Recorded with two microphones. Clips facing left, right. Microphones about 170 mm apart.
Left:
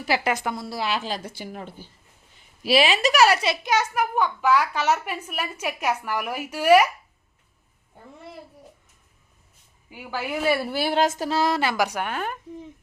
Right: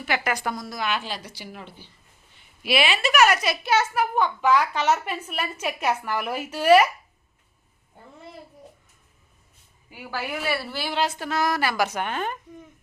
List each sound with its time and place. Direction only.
0.3 s speech: 25° left (ahead or behind)
3.7 s a child's voice: 15° left (ahead or behind)
9.9 s a child's voice: 15° left (ahead or behind)
10.7 s a woman's voice: 50° left (ahead or behind)
11.3 s a child's voice: 30° left (ahead or behind); by 12.4 s 10° left (ahead or behind)